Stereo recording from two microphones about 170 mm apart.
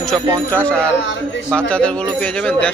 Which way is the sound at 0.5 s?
10° left (ahead or behind).